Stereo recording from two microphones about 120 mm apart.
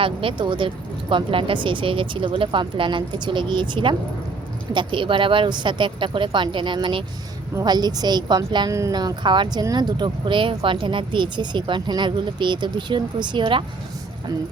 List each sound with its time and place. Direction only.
0.0 s speech: 45° right (ahead or behind)